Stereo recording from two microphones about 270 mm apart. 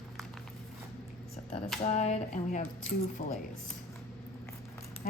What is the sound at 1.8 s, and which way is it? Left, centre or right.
Speech, left.